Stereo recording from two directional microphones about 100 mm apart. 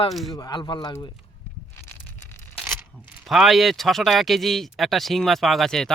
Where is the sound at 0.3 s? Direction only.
35° left (ahead or behind).